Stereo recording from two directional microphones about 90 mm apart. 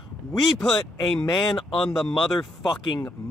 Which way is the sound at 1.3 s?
50° left (ahead or behind).